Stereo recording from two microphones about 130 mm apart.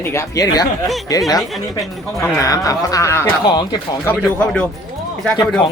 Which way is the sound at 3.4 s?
35° left (ahead or behind).